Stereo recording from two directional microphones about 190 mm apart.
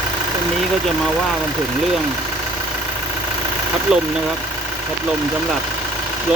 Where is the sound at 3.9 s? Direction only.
5° right (ahead or behind).